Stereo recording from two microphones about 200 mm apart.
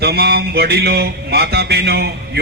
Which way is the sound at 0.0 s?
50° right (ahead or behind).